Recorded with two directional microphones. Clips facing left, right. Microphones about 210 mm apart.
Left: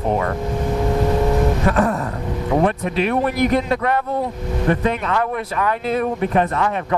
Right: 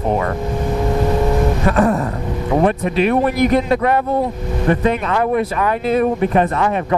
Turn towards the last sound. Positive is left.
turn(degrees=-15)  # may be behind; listen again after turning